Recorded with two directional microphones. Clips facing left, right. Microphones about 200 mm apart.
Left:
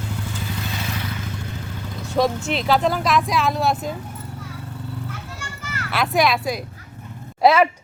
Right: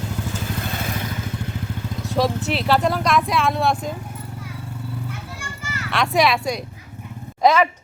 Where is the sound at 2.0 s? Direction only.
Centre (ahead or behind).